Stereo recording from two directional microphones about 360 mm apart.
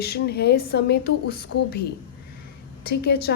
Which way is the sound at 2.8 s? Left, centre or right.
Left.